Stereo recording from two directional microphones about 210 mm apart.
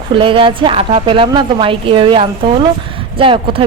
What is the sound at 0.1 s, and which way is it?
A woman's voice, 25° right (ahead or behind).